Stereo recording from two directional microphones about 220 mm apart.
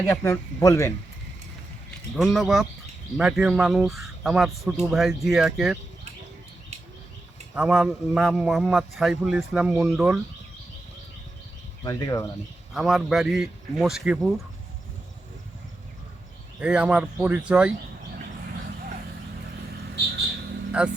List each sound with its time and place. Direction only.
0.1 s speech: 10° left (ahead or behind)
2.1 s a man's voice: centre (ahead or behind)
7.5 s a man's voice: 5° right (ahead or behind)
11.8 s speech: 15° left (ahead or behind)
12.7 s a man's voice: centre (ahead or behind)
16.6 s a man's voice: 5° right (ahead or behind)
20.8 s a man's voice: 5° right (ahead or behind)